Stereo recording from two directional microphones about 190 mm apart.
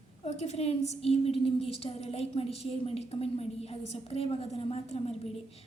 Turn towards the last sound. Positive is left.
turn(degrees=35)  # may be behind; listen again after turning